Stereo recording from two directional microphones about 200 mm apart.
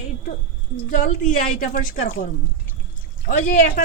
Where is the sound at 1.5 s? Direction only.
45° left (ahead or behind).